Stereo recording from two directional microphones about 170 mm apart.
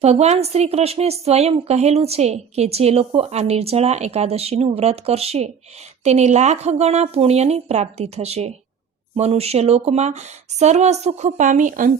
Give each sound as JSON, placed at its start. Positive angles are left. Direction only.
{"t": 0.0, "sound": "a woman's voice", "side_deg": -40}